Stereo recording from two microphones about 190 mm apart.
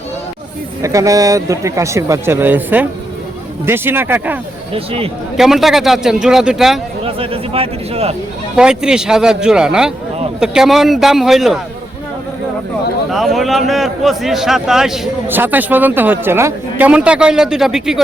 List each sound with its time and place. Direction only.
0.8 s speech: 15° right (ahead or behind)
4.7 s speech: 30° right (ahead or behind)
5.4 s a man's voice: centre (ahead or behind)
7.0 s speech: 30° right (ahead or behind)
8.5 s a man's voice: 5° right (ahead or behind)
13.1 s a man's voice: centre (ahead or behind)